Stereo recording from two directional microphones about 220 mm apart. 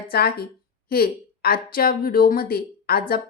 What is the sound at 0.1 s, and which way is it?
A woman's voice, 45° left (ahead or behind).